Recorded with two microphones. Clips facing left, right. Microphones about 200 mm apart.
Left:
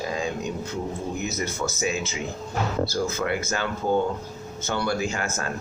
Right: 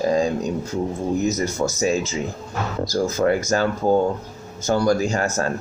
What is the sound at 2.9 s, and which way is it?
Speech, 40° right (ahead or behind).